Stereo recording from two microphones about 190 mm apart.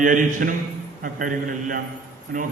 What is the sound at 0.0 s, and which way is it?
A man's voice, 45° right (ahead or behind).